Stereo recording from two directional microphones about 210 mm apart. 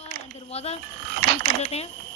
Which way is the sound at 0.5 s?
30° left (ahead or behind).